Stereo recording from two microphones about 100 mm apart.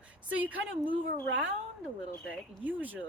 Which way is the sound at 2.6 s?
15° right (ahead or behind).